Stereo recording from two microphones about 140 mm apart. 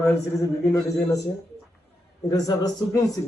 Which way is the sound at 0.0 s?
20° left (ahead or behind).